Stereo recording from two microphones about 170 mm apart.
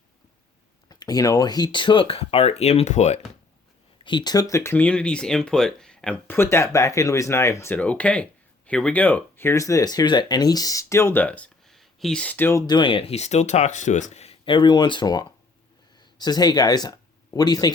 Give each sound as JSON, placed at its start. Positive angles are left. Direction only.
{"t": 0.9, "sound": "speech", "side_deg": 20}
{"t": 4.0, "sound": "speech", "side_deg": 25}